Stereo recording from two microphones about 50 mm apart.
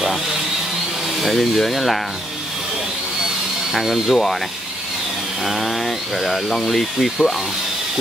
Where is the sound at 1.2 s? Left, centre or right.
Centre.